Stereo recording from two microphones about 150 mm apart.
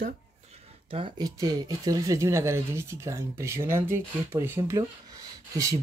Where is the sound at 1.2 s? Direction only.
25° right (ahead or behind).